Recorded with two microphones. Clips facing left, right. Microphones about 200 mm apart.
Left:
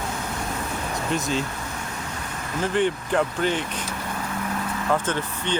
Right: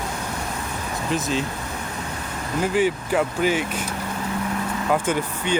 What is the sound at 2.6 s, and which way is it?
Speech, 5° right (ahead or behind).